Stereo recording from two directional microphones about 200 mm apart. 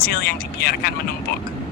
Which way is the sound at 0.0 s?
50° left (ahead or behind).